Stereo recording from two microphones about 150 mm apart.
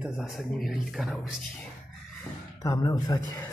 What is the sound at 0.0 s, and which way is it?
Speech, centre (ahead or behind).